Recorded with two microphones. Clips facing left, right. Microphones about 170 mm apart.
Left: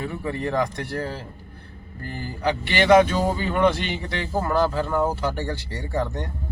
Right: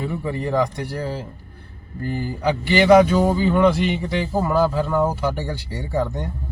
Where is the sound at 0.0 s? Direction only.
10° right (ahead or behind).